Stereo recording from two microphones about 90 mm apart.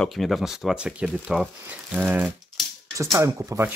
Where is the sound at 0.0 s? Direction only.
Centre (ahead or behind).